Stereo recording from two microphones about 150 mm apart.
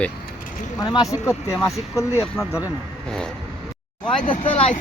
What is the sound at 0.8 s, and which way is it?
Speech, 25° left (ahead or behind).